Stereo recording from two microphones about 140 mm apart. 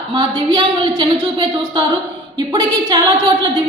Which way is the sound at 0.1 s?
35° right (ahead or behind).